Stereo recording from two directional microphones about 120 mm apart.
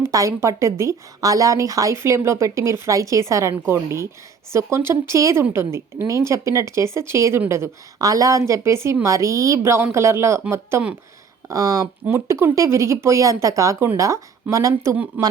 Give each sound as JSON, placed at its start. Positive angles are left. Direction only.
{"t": 0.0, "sound": "speech", "side_deg": -25}